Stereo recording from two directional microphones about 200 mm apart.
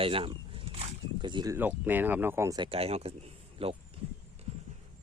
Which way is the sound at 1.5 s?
10° right (ahead or behind).